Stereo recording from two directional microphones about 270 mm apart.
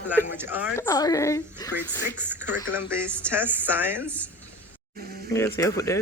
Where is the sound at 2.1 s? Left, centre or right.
Centre.